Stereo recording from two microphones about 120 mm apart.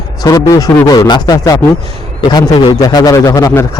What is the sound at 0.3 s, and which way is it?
Speech, 30° left (ahead or behind).